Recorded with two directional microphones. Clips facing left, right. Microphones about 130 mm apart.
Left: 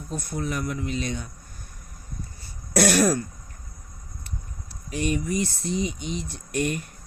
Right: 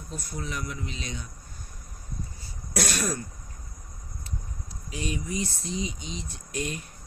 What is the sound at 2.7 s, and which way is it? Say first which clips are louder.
Speech: left 9 dB; 65° left (ahead or behind).